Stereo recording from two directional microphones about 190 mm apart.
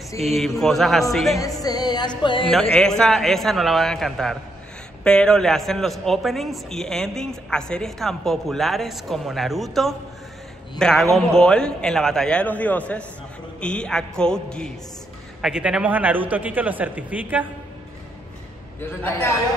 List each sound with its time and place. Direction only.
0.2 s a man's voice: centre (ahead or behind)
1.4 s music: 20° left (ahead or behind)
2.8 s a man's voice: 5° left (ahead or behind)
18.9 s a man's voice: 10° left (ahead or behind)